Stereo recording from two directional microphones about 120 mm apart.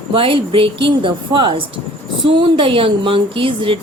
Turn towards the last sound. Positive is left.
turn(degrees=-45)  # may be behind; listen again after turning